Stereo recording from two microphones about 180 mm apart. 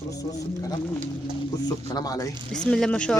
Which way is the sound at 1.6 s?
20° left (ahead or behind).